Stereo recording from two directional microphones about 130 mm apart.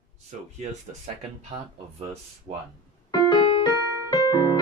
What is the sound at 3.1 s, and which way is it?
Keyboard, 30° left (ahead or behind).